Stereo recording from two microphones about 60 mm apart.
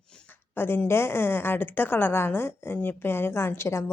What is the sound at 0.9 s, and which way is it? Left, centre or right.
A woman's voice, left.